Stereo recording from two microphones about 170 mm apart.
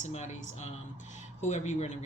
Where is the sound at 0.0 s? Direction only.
45° left (ahead or behind).